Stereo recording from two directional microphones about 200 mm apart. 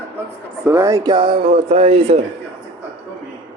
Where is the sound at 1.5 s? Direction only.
35° right (ahead or behind).